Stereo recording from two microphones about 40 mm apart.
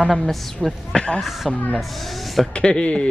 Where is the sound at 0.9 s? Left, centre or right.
Left.